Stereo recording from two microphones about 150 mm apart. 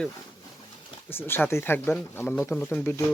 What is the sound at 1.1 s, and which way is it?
Speech, 15° left (ahead or behind).